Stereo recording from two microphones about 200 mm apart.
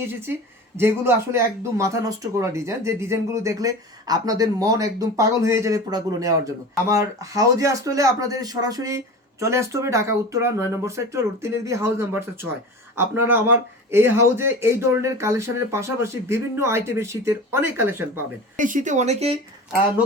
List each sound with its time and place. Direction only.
0.0 s speech: 10° right (ahead or behind)
18.5 s speech: 40° right (ahead or behind)